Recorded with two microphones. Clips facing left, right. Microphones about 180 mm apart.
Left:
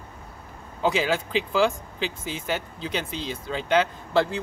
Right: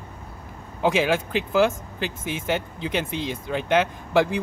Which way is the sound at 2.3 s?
20° right (ahead or behind).